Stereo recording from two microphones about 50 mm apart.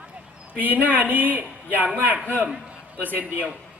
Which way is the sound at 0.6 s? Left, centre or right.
Right.